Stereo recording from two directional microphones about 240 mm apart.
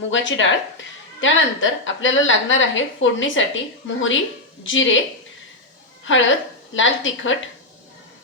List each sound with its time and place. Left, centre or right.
0.1 s a woman's voice: left
6.1 s a woman's voice: left